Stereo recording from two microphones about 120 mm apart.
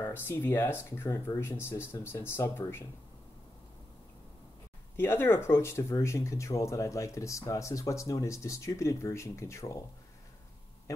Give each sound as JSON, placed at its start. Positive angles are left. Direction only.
{"t": 0.0, "sound": "speech", "side_deg": 20}
{"t": 4.9, "sound": "speech", "side_deg": 20}